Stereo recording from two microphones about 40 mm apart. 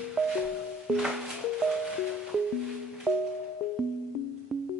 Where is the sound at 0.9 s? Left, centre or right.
Right.